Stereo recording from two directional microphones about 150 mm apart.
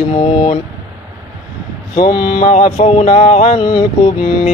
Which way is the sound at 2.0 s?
90° left.